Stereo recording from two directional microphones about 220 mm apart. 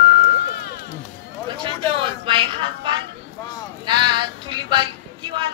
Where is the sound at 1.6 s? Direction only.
25° right (ahead or behind).